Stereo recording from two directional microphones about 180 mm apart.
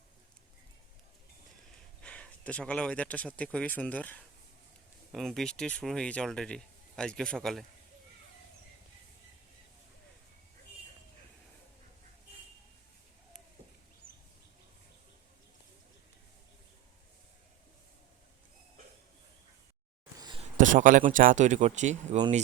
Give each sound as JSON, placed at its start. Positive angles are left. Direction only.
{"t": 2.0, "sound": "speech", "side_deg": 5}
{"t": 20.1, "sound": "a sound", "side_deg": -25}
{"t": 20.6, "sound": "speech", "side_deg": -45}